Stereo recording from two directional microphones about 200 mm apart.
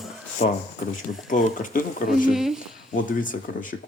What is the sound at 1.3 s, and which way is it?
Speech, 40° left (ahead or behind).